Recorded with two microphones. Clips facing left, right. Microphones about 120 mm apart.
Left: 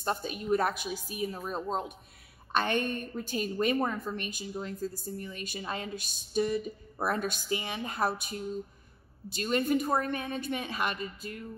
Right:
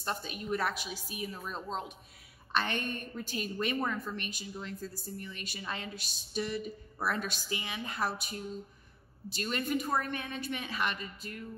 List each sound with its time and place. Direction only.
0.0 s a woman's voice: 45° left (ahead or behind)
9.4 s a woman's voice: 40° left (ahead or behind)